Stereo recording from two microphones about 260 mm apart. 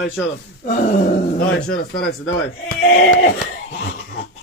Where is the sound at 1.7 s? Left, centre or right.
Left.